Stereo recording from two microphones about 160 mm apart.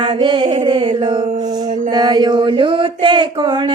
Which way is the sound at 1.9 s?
25° right (ahead or behind).